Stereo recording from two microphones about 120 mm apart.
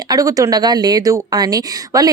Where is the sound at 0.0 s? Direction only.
30° right (ahead or behind).